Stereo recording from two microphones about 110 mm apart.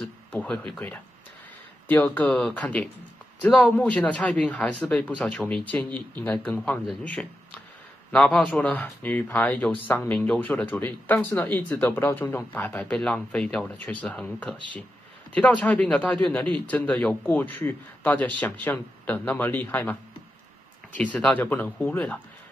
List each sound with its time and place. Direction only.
0.3 s speech: 15° left (ahead or behind)
2.1 s speech: 10° left (ahead or behind)
21.0 s speech: 10° left (ahead or behind)